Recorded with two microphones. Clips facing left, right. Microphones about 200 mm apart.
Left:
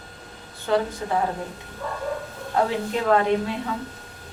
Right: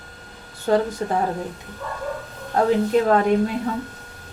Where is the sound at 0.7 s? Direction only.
40° right (ahead or behind).